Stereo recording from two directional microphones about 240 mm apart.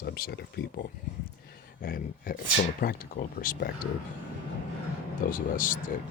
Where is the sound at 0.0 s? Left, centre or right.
Left.